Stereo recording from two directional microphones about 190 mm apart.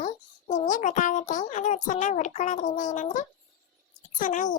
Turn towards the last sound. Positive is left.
turn(degrees=40)  # may be behind; listen again after turning